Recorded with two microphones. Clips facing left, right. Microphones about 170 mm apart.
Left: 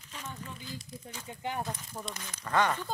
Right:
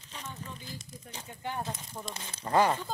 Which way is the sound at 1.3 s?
15° left (ahead or behind).